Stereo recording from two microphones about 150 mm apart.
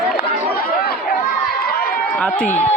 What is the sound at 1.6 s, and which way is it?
Run, 90° left.